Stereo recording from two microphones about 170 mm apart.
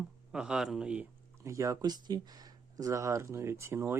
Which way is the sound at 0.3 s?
5° right (ahead or behind).